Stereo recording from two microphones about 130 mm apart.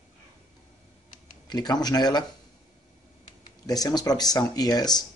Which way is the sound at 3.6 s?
30° left (ahead or behind).